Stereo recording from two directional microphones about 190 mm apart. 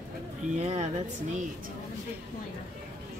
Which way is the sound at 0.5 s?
35° right (ahead or behind).